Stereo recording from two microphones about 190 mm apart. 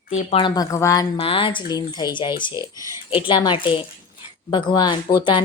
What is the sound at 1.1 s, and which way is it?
A woman's voice, 30° left (ahead or behind).